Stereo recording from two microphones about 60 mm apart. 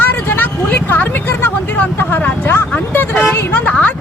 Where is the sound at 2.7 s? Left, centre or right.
Left.